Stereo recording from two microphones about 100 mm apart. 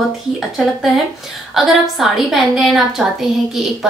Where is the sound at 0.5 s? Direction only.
Centre (ahead or behind).